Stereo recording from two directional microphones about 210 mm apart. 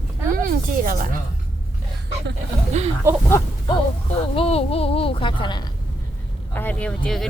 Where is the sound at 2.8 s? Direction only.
35° right (ahead or behind).